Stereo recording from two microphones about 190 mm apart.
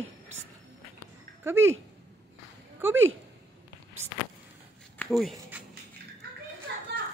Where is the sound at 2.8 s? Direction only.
10° right (ahead or behind).